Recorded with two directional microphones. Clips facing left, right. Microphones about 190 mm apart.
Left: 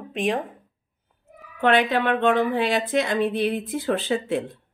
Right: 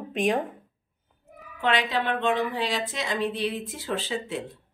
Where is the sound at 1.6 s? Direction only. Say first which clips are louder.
Left 6 dB; 55° left (ahead or behind).